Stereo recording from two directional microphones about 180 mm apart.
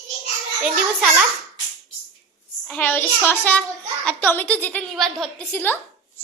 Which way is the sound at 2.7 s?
10° left (ahead or behind).